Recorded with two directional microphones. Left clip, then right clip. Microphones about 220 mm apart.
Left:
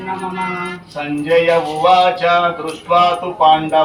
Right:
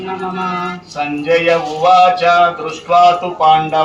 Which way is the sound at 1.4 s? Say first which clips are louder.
Right 1 dB; 50° right (ahead or behind).